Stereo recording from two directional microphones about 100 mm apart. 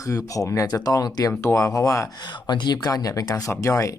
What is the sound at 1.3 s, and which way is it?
Speech, 25° left (ahead or behind).